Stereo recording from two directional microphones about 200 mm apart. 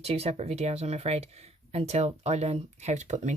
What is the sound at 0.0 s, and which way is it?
Speech, 30° right (ahead or behind).